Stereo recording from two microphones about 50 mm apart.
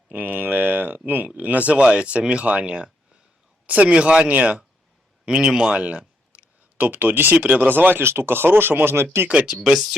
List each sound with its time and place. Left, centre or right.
0.1 s a sound: right
1.4 s speech: right
7.3 s speech: right
9.6 s speech: centre